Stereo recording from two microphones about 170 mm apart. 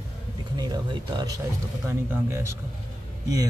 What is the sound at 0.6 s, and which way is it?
Speech, 25° right (ahead or behind).